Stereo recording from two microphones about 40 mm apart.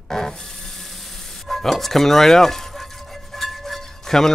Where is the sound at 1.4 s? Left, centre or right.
Centre.